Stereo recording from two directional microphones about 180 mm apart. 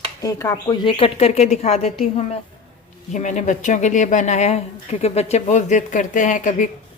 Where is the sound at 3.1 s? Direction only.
40° left (ahead or behind).